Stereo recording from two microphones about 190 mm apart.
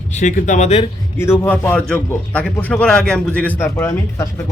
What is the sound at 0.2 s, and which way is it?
Speech, 40° left (ahead or behind).